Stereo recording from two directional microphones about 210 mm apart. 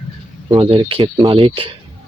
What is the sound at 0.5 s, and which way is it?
Speech, 25° right (ahead or behind).